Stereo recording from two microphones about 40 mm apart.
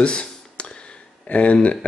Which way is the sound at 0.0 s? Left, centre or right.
Left.